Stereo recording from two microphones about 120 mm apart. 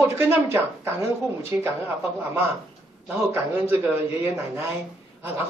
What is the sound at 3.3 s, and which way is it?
A man's voice, 20° right (ahead or behind).